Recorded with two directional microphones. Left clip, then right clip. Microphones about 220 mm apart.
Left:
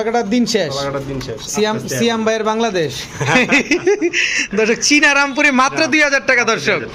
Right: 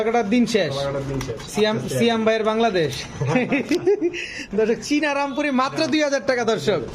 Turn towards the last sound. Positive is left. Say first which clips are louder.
# left 6 dB
turn(degrees=-15)  # may be behind; listen again after turning